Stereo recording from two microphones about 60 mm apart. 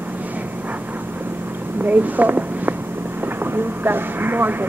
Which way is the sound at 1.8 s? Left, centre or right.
Right.